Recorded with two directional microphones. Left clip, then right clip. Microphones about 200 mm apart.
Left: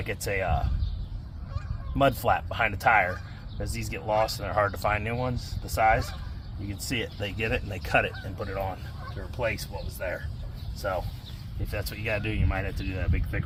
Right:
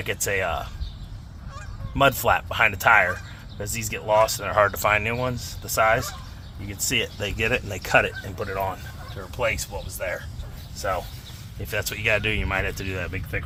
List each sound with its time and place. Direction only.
0.0 s speech: 30° right (ahead or behind)
2.0 s speech: 30° right (ahead or behind)
11.7 s speech: 45° right (ahead or behind)